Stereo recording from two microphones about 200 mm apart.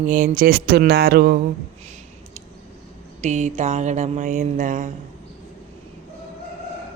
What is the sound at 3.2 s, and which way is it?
Speech, 35° right (ahead or behind).